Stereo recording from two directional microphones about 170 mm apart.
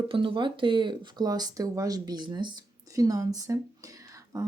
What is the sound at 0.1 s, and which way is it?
Speech, 30° right (ahead or behind).